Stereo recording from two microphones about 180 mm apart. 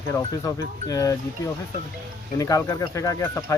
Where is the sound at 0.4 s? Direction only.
20° left (ahead or behind).